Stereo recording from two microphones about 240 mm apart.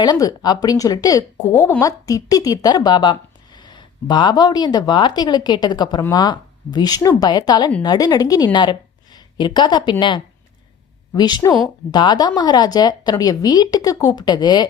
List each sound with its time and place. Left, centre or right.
0.0 s a woman's voice: centre